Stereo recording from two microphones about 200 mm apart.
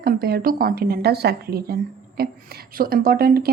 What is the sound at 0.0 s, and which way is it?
Speech, 50° right (ahead or behind).